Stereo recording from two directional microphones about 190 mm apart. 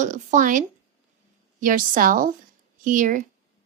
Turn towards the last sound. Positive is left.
turn(degrees=-45)  # may be behind; listen again after turning